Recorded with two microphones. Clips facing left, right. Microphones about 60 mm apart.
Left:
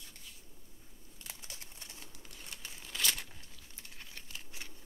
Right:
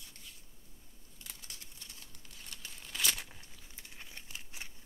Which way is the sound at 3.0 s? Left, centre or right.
Centre.